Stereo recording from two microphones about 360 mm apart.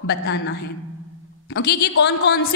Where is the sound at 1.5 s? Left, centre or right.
Left.